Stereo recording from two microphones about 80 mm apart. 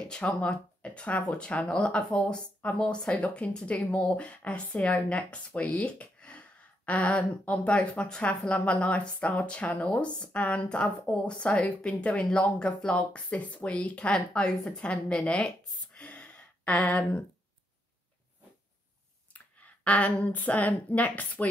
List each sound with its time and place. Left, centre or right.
0.1 s speech: centre
19.6 s a woman's voice: centre